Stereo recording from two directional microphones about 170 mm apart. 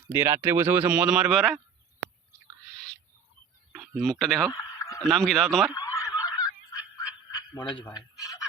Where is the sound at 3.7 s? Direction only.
Centre (ahead or behind).